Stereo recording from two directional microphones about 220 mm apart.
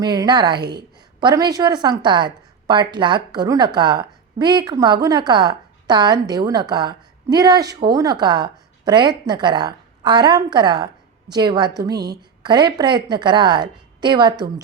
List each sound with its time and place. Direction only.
0.0 s a woman's voice: 20° right (ahead or behind)
11.9 s a woman's voice: 45° right (ahead or behind)
12.4 s a woman's voice: 20° right (ahead or behind)